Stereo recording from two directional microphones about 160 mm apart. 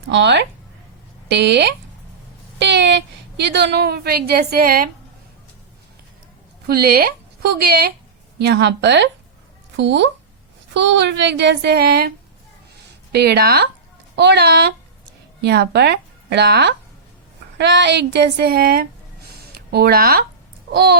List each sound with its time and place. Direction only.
0.1 s a woman's voice: 90° right; by 4.9 s 65° right (ahead or behind)
6.7 s speech: 75° right (ahead or behind)
8.4 s speech: 90° right; by 12.1 s 75° right (ahead or behind)
13.1 s speech: 90° right; by 18.9 s 70° right (ahead or behind)
19.4 s speech: 80° right